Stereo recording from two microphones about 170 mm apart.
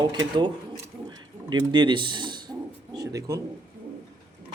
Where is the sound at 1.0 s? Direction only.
25° right (ahead or behind).